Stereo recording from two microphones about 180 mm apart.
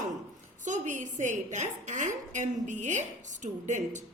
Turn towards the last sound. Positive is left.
turn(degrees=-40)  # may be behind; listen again after turning